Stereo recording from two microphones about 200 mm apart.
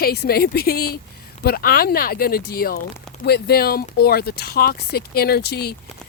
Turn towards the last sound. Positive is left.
turn(degrees=55)  # may be behind; listen again after turning